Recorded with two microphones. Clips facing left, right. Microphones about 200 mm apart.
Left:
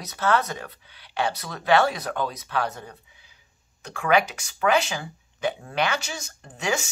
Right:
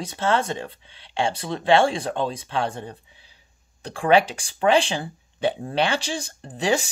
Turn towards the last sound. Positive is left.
turn(degrees=-35)  # may be behind; listen again after turning